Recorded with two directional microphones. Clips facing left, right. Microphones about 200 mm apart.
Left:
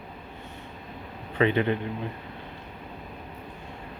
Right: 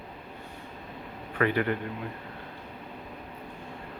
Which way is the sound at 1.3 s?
20° left (ahead or behind).